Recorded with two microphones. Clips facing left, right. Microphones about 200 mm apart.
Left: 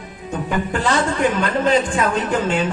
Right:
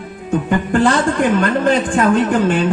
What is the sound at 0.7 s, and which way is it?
A man's voice, 55° right (ahead or behind).